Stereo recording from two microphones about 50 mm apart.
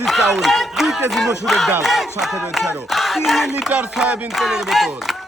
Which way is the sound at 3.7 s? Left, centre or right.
Right.